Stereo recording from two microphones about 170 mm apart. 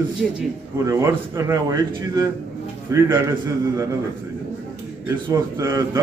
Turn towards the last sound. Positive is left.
turn(degrees=-15)  # may be behind; listen again after turning